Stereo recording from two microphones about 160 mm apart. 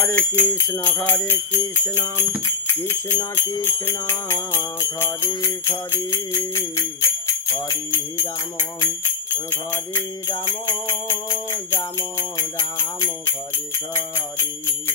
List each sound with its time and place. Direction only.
0.0 s jingle bell: 10° left (ahead or behind)
2.8 s jingle bell: 15° left (ahead or behind)
9.3 s jingle bell: 15° left (ahead or behind)